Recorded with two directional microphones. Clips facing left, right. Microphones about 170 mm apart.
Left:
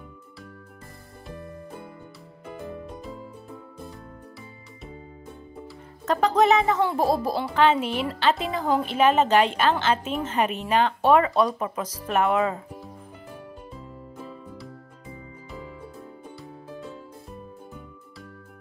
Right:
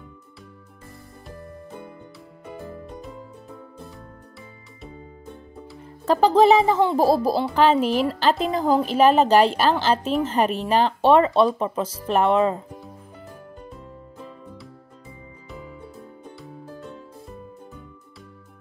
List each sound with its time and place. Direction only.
2.9 s music: centre (ahead or behind)
6.0 s a woman's voice: 30° right (ahead or behind)
13.6 s music: centre (ahead or behind)